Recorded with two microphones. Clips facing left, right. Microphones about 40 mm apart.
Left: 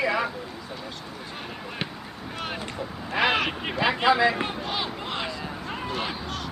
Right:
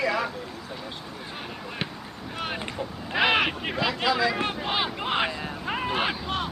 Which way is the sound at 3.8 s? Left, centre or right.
Left.